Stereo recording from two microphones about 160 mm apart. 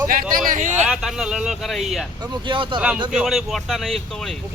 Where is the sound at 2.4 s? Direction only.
30° right (ahead or behind).